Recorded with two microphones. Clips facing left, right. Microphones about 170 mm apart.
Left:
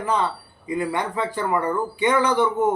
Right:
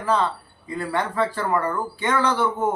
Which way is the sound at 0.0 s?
15° left (ahead or behind).